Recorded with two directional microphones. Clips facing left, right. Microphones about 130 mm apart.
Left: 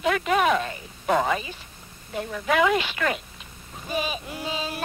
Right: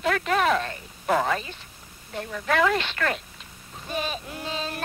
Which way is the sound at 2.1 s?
5° left (ahead or behind).